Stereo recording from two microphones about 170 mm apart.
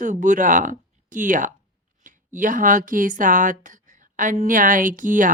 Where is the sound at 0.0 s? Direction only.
50° right (ahead or behind).